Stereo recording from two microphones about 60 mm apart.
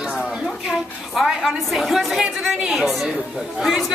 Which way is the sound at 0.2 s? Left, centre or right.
Centre.